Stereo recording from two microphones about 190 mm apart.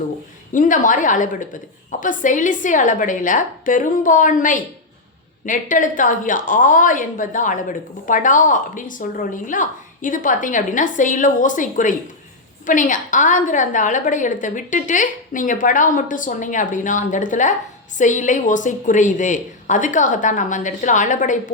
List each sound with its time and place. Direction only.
0.5 s a woman's voice: 45° left (ahead or behind)